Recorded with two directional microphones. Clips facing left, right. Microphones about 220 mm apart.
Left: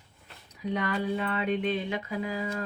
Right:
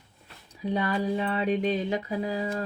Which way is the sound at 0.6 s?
35° right (ahead or behind).